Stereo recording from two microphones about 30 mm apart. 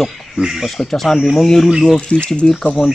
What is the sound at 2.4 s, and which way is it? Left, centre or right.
Speech, left.